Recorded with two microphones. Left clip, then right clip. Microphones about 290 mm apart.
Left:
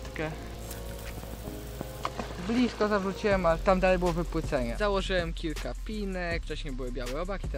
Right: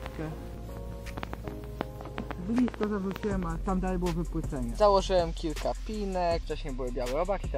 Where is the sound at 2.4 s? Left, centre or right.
Left.